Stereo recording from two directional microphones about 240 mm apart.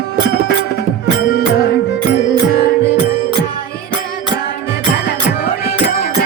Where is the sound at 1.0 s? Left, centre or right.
Left.